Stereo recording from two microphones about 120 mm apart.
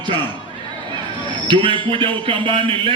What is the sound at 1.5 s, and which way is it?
Speech, 45° right (ahead or behind).